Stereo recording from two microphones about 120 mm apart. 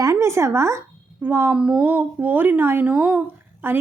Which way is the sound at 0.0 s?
25° right (ahead or behind).